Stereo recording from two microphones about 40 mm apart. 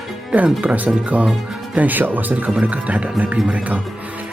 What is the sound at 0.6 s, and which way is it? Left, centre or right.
Speech, right.